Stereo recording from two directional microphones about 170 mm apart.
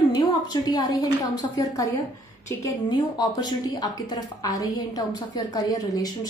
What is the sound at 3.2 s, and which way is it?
A woman's voice, 25° left (ahead or behind).